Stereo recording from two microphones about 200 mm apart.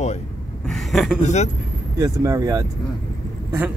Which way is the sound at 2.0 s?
15° right (ahead or behind).